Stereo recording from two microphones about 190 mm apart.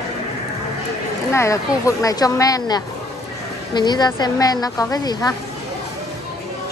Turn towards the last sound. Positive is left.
turn(degrees=20)  # may be behind; listen again after turning